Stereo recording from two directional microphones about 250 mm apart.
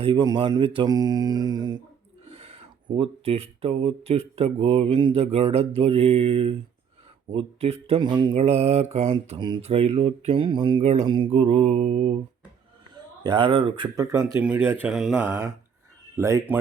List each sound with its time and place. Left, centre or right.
0.0 s speech: centre
2.3 s mantra: right
13.2 s speech: centre